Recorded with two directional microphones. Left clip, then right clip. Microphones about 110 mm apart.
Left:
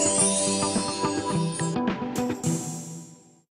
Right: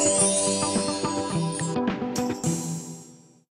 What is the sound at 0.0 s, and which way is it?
Music, centre (ahead or behind).